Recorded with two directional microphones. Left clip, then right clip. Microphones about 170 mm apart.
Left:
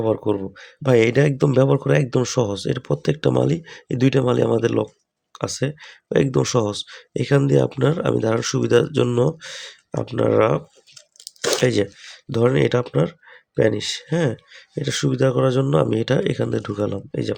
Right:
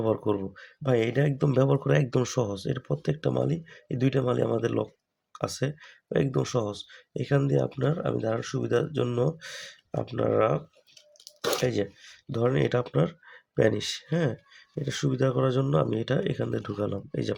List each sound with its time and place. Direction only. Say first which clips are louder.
0.0 s speech: left 6 dB; 10° left (ahead or behind); by 1.5 s 25° left (ahead or behind)
1.5 s speech: left 7 dB; 15° left (ahead or behind)
9.4 s speech: left 6 dB; 15° left (ahead or behind)